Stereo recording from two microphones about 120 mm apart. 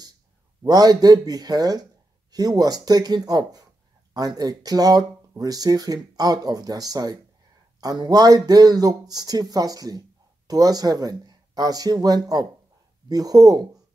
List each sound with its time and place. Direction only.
0.7 s speech: 35° right (ahead or behind)